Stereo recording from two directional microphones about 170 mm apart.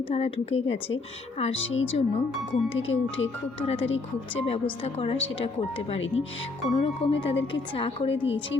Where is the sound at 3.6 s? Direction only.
35° left (ahead or behind).